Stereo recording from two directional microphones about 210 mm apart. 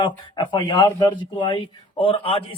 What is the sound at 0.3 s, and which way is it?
A man's voice, 20° left (ahead or behind).